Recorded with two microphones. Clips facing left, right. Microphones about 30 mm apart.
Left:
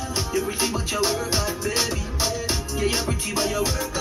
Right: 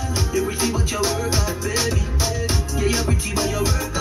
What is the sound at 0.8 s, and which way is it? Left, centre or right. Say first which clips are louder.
Music: right 1 dB; centre.